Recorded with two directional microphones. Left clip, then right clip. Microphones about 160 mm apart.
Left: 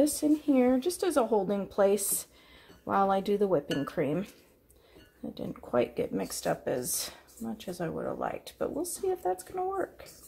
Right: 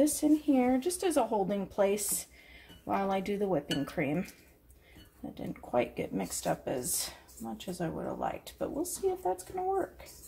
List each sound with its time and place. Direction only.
0.0 s speech: centre (ahead or behind)
0.5 s speech: 35° left (ahead or behind)
5.3 s speech: 35° left (ahead or behind)